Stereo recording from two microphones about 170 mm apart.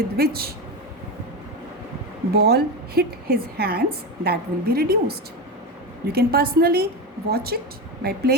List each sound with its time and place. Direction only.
0.2 s a woman's voice: 65° right (ahead or behind)
2.3 s a woman's voice: 65° right (ahead or behind)